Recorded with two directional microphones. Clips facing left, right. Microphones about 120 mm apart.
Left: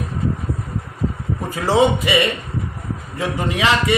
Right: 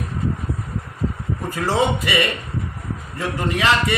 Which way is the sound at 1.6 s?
20° left (ahead or behind).